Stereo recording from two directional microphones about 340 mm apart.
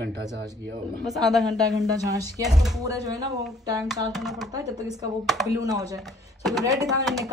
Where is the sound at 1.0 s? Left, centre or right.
Centre.